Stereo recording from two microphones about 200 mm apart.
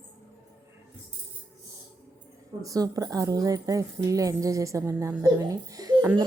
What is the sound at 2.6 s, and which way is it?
Speech, 15° right (ahead or behind).